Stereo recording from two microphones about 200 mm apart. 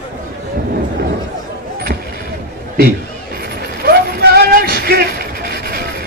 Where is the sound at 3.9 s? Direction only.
50° right (ahead or behind).